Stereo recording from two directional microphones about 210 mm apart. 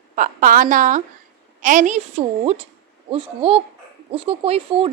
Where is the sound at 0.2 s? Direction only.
40° right (ahead or behind).